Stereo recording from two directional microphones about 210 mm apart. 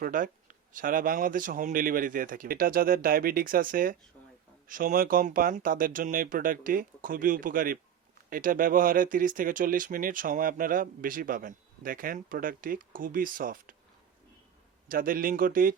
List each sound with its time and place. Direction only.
0.0 s speech: 40° right (ahead or behind)
14.8 s speech: 40° right (ahead or behind)